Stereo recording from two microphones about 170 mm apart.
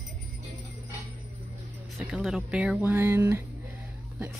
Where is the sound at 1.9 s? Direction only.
5° right (ahead or behind).